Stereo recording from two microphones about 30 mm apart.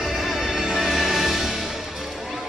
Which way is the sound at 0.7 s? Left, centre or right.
Centre.